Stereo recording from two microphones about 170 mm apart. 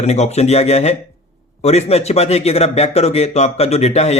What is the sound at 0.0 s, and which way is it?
A man's voice, 40° left (ahead or behind).